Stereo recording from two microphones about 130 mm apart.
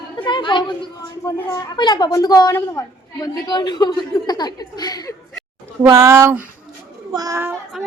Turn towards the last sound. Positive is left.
turn(degrees=-20)  # may be behind; listen again after turning